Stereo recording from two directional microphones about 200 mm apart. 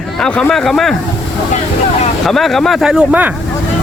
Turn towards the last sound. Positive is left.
turn(degrees=-5)  # may be behind; listen again after turning